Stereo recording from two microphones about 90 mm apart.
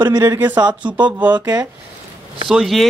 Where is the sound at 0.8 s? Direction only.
60° right (ahead or behind).